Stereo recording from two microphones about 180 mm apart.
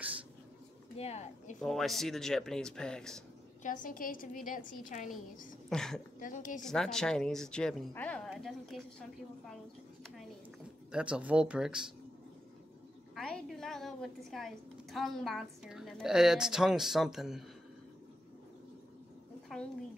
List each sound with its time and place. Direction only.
0.9 s speech: 35° left (ahead or behind)
1.6 s a woman's voice: centre (ahead or behind)
3.6 s a woman's voice: 45° left (ahead or behind)
5.7 s a woman's voice: 5° left (ahead or behind)
6.1 s a woman's voice: 45° left (ahead or behind)
6.6 s a woman's voice: 5° left (ahead or behind)
10.9 s a woman's voice: 5° right (ahead or behind)
13.1 s a woman's voice: centre (ahead or behind)